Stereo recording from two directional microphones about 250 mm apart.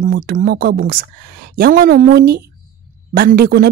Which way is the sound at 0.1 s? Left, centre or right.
Right.